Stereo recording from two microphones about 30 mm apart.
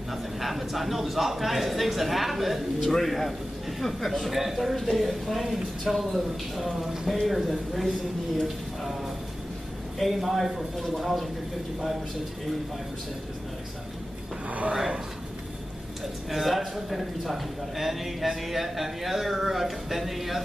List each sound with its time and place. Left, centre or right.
0.1 s a man's voice: centre
2.9 s a man's voice: centre
9.9 s a man's voice: centre
16.3 s a man's voice: centre